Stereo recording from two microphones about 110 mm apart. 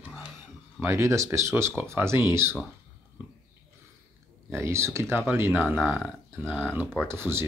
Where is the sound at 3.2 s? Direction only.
15° right (ahead or behind).